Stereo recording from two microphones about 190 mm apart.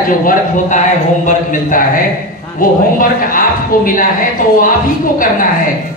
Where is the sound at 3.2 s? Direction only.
45° left (ahead or behind).